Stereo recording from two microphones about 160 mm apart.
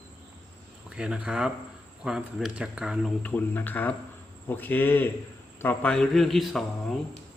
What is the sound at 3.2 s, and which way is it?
A man's voice, 10° left (ahead or behind).